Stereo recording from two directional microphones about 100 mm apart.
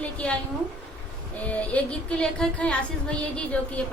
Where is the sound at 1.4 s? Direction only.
15° left (ahead or behind).